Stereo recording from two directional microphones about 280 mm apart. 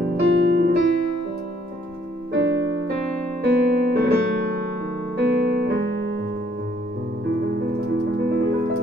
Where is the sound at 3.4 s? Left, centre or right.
Right.